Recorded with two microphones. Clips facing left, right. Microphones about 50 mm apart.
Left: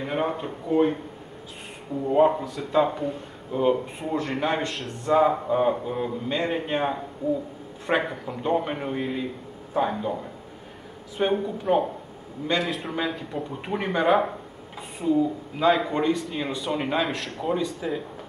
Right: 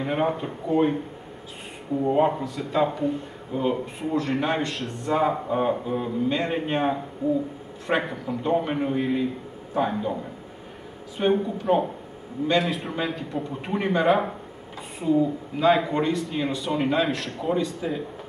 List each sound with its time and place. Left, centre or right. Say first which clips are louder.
0.0 s speech: right 2 dB; centre
2.1 s speech: left 6 dB; centre
7.2 s speech: right 1 dB; centre
7.8 s speech: even; centre
11.1 s speech: right 2 dB; centre